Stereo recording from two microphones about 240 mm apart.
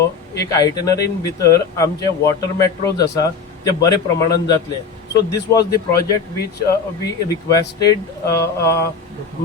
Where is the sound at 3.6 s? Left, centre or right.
Centre.